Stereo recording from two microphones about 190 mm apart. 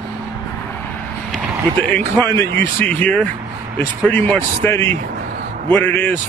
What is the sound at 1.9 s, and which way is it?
Speech, 10° left (ahead or behind).